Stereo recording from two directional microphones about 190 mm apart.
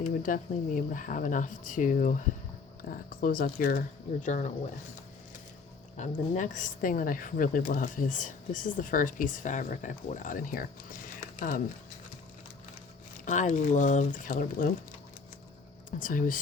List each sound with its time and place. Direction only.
0.0 s speech: 40° left (ahead or behind)
6.0 s speech: 40° left (ahead or behind)
13.2 s speech: 40° left (ahead or behind)
15.9 s speech: 45° left (ahead or behind)